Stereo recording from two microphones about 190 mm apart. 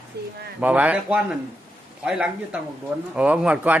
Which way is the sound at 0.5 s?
5° right (ahead or behind).